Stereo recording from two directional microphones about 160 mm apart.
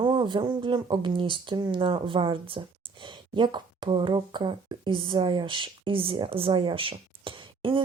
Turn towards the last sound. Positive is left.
turn(degrees=-35)  # may be behind; listen again after turning